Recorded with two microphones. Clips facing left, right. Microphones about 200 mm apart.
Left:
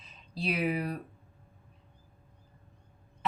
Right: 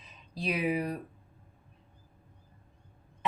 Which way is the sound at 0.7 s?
15° right (ahead or behind).